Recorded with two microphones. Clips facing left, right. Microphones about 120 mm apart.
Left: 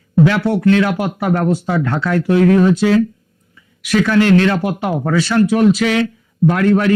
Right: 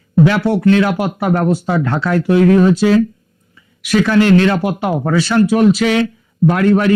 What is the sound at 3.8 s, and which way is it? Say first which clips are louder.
Speech: right 1 dB; 25° right (ahead or behind).